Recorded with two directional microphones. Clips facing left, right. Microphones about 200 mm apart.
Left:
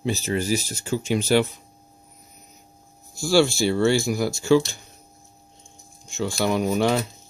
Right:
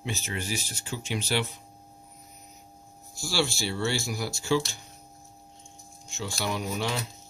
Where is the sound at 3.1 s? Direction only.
50° left (ahead or behind).